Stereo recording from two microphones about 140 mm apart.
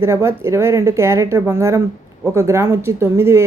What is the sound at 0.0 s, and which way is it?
Speech, 20° right (ahead or behind).